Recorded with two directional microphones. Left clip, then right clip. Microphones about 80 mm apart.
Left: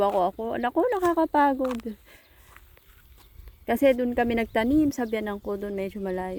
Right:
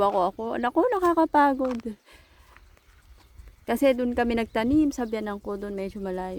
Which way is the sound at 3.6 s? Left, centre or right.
Centre.